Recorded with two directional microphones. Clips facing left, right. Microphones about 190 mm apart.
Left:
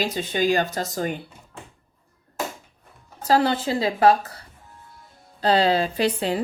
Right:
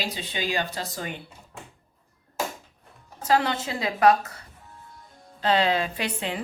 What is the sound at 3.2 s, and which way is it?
Speech, 35° left (ahead or behind).